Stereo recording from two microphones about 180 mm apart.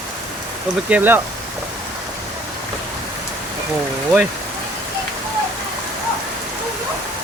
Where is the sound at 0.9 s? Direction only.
10° right (ahead or behind).